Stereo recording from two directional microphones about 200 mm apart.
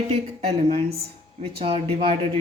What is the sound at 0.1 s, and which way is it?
Speech, 30° right (ahead or behind).